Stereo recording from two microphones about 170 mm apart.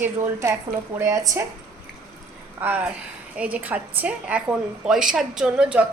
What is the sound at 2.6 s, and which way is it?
A woman's voice, 10° right (ahead or behind).